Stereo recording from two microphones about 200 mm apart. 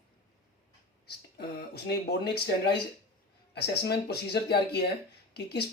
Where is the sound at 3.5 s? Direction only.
55° left (ahead or behind).